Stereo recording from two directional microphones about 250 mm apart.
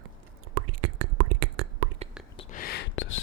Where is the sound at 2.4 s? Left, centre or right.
Left.